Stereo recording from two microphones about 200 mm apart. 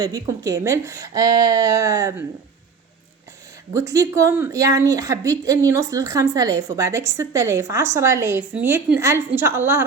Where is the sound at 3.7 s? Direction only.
15° right (ahead or behind).